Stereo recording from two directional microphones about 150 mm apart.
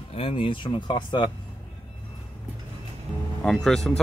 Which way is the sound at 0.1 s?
40° left (ahead or behind).